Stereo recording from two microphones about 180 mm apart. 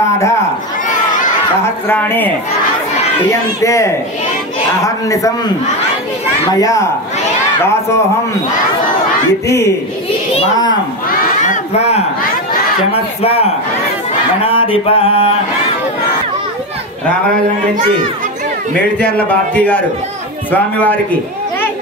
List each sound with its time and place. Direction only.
1.9 s a man's voice: 10° left (ahead or behind)
6.6 s a man's voice: 20° left (ahead or behind)
10.5 s speech: 20° left (ahead or behind)
11.1 s a sound: 45° left (ahead or behind)
13.2 s mantra: 35° left (ahead or behind)
19.1 s a man's voice: 5° left (ahead or behind)